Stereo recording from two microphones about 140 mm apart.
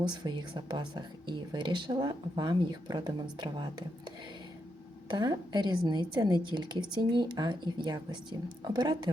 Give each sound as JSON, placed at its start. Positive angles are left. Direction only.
{"t": 0.0, "sound": "a woman's voice", "side_deg": -30}
{"t": 5.0, "sound": "a woman's voice", "side_deg": -30}